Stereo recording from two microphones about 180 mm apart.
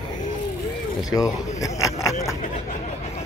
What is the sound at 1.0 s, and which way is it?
Speech, 20° left (ahead or behind).